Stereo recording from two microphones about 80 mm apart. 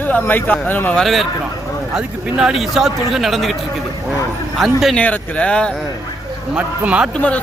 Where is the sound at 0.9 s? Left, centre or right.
Centre.